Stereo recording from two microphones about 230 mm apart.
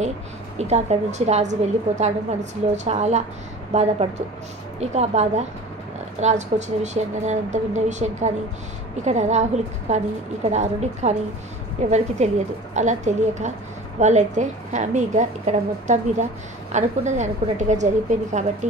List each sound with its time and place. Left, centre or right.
0.6 s a woman's voice: right